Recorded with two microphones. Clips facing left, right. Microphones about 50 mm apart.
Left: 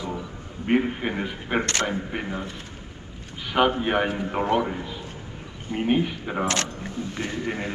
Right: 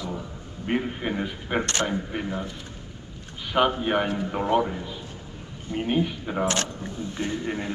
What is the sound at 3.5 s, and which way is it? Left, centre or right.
A man's voice, centre.